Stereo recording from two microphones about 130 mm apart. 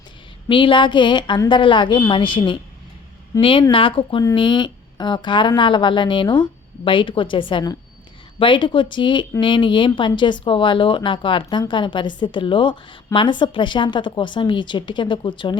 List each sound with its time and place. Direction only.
0.4 s speech: 40° left (ahead or behind)
3.3 s speech: 25° left (ahead or behind)
3.7 s speech: 40° left (ahead or behind)